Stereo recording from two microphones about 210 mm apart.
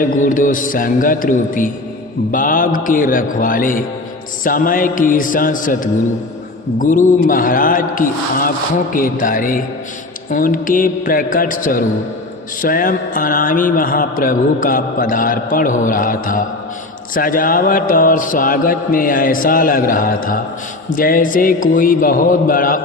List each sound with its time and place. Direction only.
0.0 s a man's voice: 40° left (ahead or behind)